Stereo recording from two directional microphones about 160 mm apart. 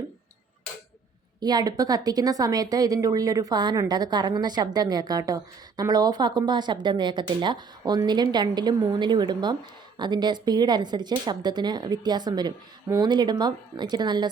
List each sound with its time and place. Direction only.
1.4 s a woman's voice: 25° right (ahead or behind)